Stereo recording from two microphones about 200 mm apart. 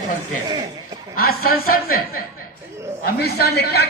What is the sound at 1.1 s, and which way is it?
A man's voice, 50° left (ahead or behind).